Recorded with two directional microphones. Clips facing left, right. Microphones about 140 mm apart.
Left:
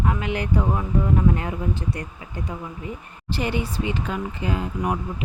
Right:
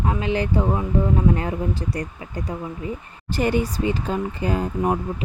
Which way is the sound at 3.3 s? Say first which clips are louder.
Right 4 dB; 45° right (ahead or behind).